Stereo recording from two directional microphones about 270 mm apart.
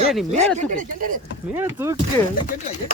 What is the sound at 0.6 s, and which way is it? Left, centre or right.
Speech, right.